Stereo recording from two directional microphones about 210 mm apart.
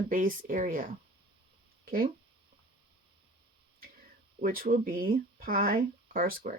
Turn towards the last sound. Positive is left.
turn(degrees=-40)  # may be behind; listen again after turning